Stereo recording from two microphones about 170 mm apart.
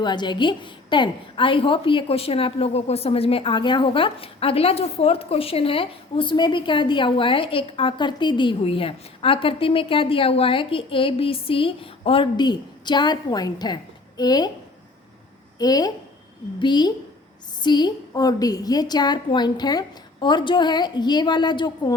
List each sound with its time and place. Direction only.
0.0 s a woman's voice: 25° left (ahead or behind)
15.5 s a woman's voice: 20° left (ahead or behind)